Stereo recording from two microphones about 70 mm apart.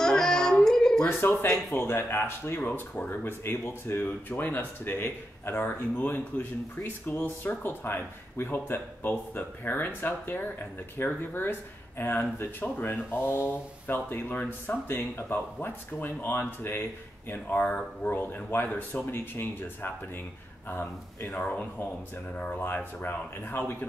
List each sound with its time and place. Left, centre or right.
0.0 s child singing: centre
1.2 s speech: left